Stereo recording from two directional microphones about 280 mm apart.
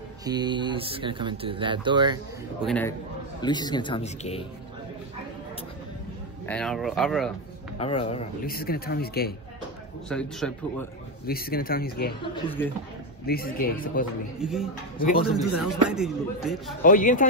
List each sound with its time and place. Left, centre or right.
0.2 s speech: centre
2.6 s speech: centre
3.3 s a man's voice: centre
6.4 s speech: centre
7.8 s speech: centre
8.5 s speech: left
10.0 s speech: centre
11.2 s speech: left
13.3 s speech: left
14.4 s speech: centre
15.0 s speech: left
15.3 s speech: centre
16.8 s speech: left